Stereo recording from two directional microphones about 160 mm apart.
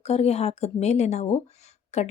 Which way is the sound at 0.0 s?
40° left (ahead or behind).